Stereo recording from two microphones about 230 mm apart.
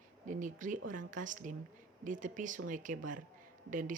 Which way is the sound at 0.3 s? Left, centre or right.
Right.